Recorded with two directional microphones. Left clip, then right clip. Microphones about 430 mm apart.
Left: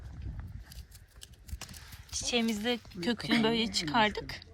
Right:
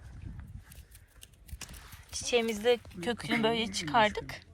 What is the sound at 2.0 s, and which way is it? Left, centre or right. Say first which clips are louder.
Speech: right 2 dB; centre.